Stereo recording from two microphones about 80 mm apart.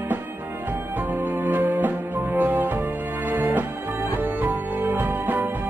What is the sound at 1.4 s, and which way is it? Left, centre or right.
Music, right.